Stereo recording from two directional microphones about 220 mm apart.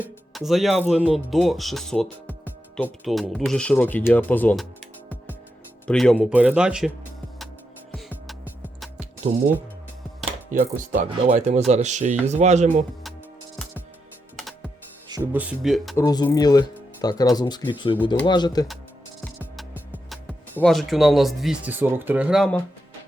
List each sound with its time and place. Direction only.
0.0 s speech: centre (ahead or behind)
5.9 s speech: centre (ahead or behind)
7.9 s music: centre (ahead or behind)
9.3 s speech: 30° right (ahead or behind)
10.5 s speech: 35° right (ahead or behind)
14.3 s music: centre (ahead or behind)
15.3 s speech: 5° right (ahead or behind)
16.0 s speech: 15° left (ahead or behind)
19.4 s music: 5° right (ahead or behind)
20.6 s speech: centre (ahead or behind)